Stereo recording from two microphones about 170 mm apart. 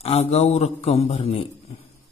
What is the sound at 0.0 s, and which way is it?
A man's voice, 35° left (ahead or behind).